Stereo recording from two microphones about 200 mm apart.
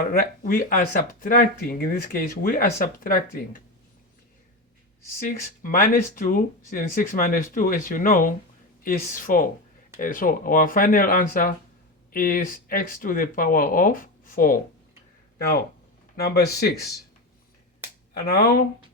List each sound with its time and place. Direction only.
0.1 s speech: 45° left (ahead or behind)
5.2 s speech: 45° left (ahead or behind)
18.1 s speech: 50° left (ahead or behind)